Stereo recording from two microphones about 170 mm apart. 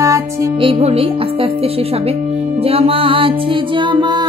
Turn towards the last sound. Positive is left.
turn(degrees=-25)  # may be behind; listen again after turning